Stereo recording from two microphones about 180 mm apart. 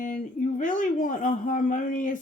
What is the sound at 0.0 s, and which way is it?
Speech, 45° left (ahead or behind).